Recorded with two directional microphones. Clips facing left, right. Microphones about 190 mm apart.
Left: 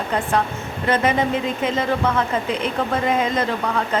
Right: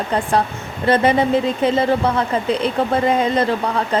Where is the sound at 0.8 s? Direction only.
35° right (ahead or behind).